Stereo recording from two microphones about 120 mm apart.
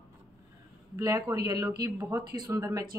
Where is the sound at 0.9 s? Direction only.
25° right (ahead or behind).